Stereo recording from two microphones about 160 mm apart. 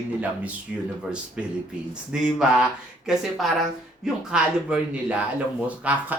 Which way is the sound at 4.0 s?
5° right (ahead or behind).